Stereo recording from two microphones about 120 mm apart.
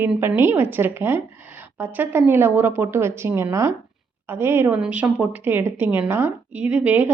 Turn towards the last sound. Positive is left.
turn(degrees=-15)  # may be behind; listen again after turning